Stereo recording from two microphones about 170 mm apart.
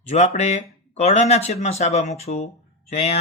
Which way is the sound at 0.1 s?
45° left (ahead or behind).